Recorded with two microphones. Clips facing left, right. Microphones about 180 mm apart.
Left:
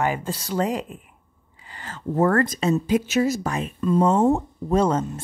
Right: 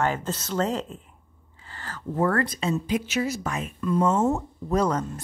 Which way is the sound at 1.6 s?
15° left (ahead or behind).